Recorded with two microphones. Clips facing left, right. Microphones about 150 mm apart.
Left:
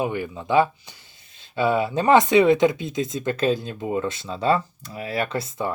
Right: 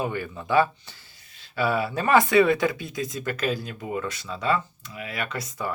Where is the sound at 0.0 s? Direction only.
15° left (ahead or behind).